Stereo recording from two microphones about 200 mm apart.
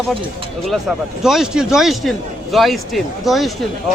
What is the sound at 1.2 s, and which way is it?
Speech, 5° right (ahead or behind).